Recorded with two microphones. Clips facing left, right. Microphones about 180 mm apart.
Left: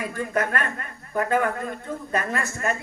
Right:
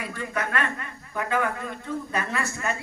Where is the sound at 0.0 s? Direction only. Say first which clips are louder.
Left 5 dB; 45° left (ahead or behind).